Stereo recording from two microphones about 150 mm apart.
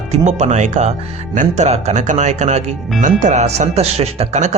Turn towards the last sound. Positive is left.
turn(degrees=-50)  # may be behind; listen again after turning